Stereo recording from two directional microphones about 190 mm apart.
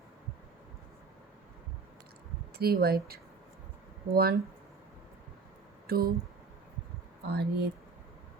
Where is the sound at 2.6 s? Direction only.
55° right (ahead or behind).